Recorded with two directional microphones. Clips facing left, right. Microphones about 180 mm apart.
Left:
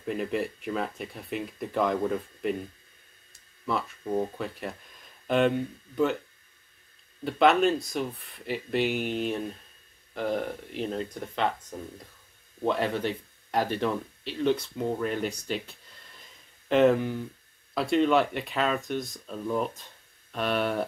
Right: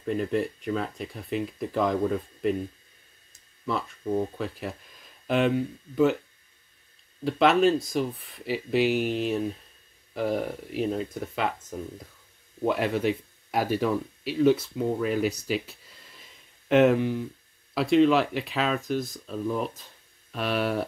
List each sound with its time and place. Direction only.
0.0 s speech: centre (ahead or behind)
3.7 s speech: centre (ahead or behind)
7.2 s speech: centre (ahead or behind)
12.6 s speech: 5° right (ahead or behind)